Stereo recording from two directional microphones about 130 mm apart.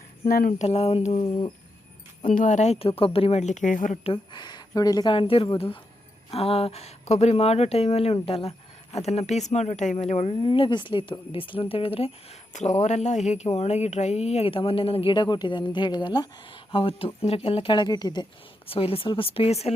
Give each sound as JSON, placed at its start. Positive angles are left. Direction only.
{"t": 0.3, "sound": "a sound", "side_deg": 90}
{"t": 0.7, "sound": "speech", "side_deg": 50}
{"t": 1.2, "sound": "speech", "side_deg": 40}
{"t": 2.2, "sound": "speech", "side_deg": 85}
{"t": 4.0, "sound": "speech", "side_deg": 40}
{"t": 10.3, "sound": "speech", "side_deg": 40}
{"t": 12.8, "sound": "speech", "side_deg": 65}
{"t": 18.7, "sound": "speech", "side_deg": 45}